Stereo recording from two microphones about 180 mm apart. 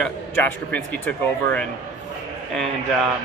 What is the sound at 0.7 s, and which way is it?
Speech, 10° left (ahead or behind).